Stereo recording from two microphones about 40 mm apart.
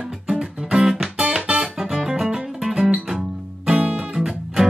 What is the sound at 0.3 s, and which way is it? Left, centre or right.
Music, centre.